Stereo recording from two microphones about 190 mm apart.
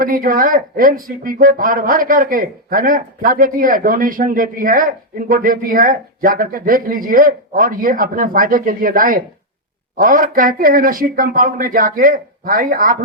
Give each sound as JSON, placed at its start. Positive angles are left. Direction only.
{"t": 0.0, "sound": "speech", "side_deg": -45}